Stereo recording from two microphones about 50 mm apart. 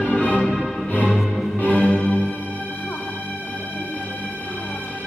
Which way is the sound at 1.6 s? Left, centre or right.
Left.